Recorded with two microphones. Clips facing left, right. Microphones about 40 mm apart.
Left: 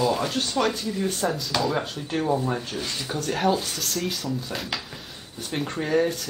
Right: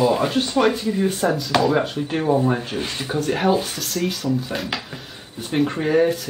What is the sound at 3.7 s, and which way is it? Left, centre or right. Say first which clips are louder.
Speech: right 4 dB; centre.